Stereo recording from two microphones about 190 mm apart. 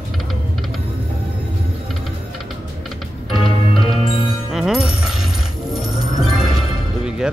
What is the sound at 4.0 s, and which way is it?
Music, 30° left (ahead or behind).